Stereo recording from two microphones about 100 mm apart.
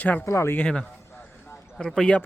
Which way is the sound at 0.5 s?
10° left (ahead or behind).